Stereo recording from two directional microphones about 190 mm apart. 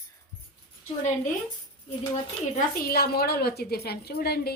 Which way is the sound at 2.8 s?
55° left (ahead or behind).